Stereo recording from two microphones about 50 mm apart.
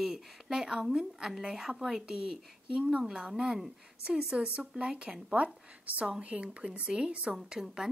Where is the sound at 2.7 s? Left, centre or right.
Right.